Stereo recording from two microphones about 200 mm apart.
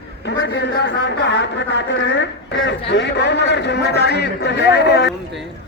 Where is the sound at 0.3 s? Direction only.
60° left (ahead or behind).